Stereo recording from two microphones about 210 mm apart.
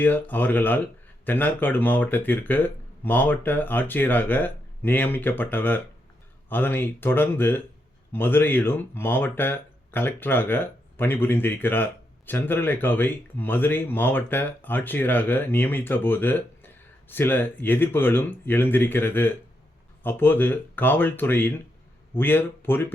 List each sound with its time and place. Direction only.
0.0 s speech: 10° left (ahead or behind)